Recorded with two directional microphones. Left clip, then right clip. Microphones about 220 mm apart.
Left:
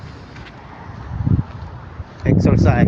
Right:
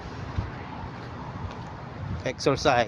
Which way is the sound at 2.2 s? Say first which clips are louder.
Left 6 dB; centre (ahead or behind).